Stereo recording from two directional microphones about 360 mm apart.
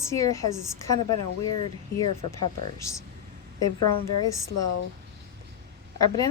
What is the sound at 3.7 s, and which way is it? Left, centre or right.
Speech, left.